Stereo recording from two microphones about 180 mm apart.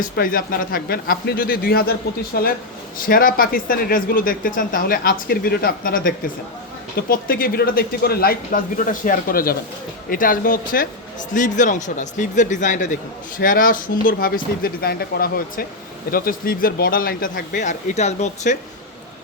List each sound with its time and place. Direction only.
0.2 s speech: 55° left (ahead or behind)